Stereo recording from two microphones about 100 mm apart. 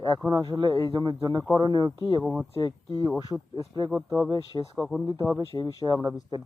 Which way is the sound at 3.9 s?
10° right (ahead or behind).